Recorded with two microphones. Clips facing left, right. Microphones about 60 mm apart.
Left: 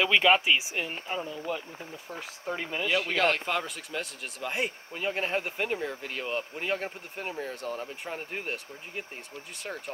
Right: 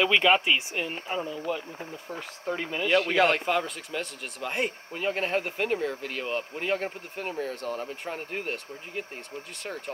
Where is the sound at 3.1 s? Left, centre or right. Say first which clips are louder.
Right 3 dB; centre.